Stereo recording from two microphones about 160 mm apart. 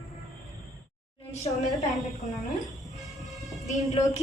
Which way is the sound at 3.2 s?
Centre (ahead or behind).